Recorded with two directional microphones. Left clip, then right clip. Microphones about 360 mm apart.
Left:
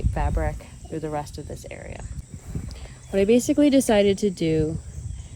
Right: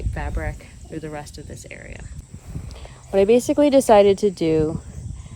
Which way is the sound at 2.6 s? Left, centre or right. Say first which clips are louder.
Right 2 dB; centre.